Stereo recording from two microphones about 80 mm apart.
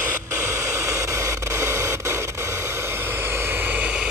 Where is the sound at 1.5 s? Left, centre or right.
Right.